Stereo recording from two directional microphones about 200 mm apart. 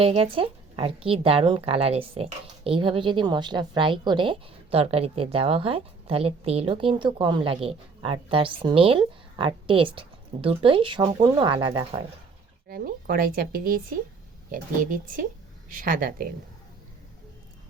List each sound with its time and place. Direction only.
0.0 s a woman's voice: 30° right (ahead or behind)
12.6 s a woman's voice: 45° right (ahead or behind)